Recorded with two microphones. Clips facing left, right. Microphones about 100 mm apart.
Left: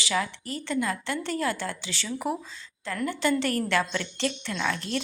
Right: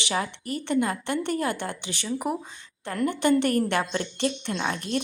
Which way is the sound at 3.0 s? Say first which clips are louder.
Right 4 dB; 55° right (ahead or behind).